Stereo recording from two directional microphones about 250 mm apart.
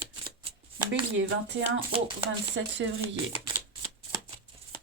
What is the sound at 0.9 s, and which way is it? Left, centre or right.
Speech, right.